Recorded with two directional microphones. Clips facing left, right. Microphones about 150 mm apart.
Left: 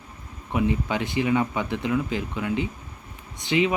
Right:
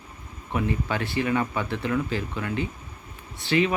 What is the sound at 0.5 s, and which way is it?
Speech, 15° left (ahead or behind).